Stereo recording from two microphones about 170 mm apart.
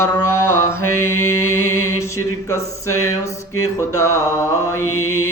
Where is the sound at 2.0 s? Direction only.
15° left (ahead or behind).